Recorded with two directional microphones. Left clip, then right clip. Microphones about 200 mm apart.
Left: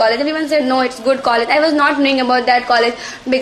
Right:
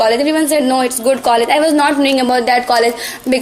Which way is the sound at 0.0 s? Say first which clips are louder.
Right 2 dB; 35° right (ahead or behind).